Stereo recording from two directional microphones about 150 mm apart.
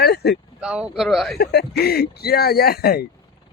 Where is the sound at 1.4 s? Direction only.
90° left.